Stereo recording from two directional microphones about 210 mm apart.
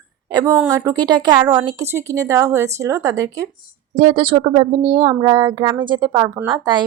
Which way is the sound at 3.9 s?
30° right (ahead or behind).